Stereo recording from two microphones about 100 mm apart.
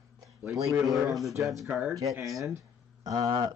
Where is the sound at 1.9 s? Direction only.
35° right (ahead or behind).